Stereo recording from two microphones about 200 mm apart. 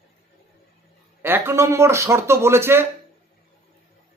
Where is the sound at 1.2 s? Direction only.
10° right (ahead or behind).